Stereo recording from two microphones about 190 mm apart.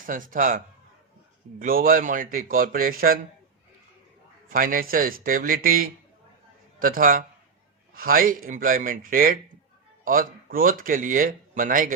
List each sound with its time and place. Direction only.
0.0 s speech: 45° right (ahead or behind)
4.4 s speech: 45° right (ahead or behind)